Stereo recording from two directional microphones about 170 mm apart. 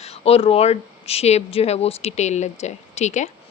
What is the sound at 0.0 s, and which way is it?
Speech, 35° left (ahead or behind).